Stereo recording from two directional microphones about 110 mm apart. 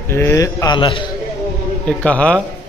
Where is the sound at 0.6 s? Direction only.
50° left (ahead or behind).